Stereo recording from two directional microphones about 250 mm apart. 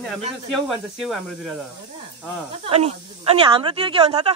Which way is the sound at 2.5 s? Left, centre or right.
Right.